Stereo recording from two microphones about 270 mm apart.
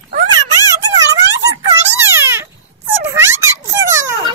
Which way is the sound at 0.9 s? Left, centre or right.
Centre.